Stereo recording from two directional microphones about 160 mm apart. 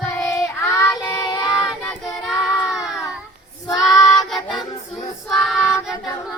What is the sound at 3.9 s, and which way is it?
Child singing, 20° left (ahead or behind).